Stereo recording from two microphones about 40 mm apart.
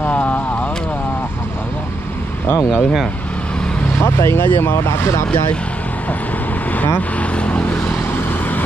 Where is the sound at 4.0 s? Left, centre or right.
Left.